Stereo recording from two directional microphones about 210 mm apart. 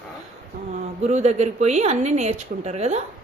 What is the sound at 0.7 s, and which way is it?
A woman's voice, 35° right (ahead or behind).